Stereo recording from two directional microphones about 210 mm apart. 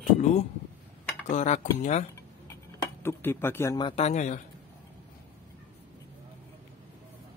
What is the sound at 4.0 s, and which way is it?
Speech, 35° left (ahead or behind).